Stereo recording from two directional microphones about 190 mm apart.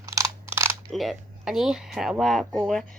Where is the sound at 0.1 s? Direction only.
15° right (ahead or behind).